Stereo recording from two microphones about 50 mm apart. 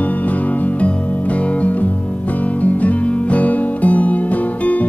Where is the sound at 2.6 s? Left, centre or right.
Left.